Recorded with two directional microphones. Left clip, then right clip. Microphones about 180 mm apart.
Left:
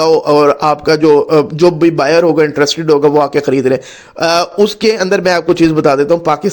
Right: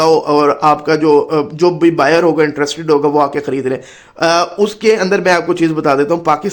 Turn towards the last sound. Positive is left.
turn(degrees=15)  # may be behind; listen again after turning